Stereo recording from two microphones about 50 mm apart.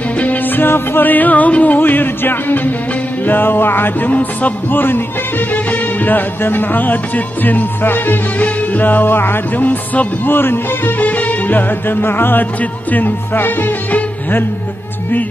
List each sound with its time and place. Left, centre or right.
0.2 s music: left
0.7 s music: left
4.1 s music: left
11.0 s music: left